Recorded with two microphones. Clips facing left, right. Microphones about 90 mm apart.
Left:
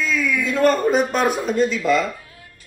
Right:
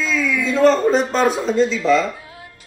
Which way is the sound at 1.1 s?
10° left (ahead or behind).